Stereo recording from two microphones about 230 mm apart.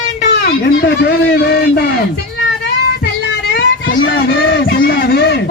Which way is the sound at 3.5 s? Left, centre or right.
Left.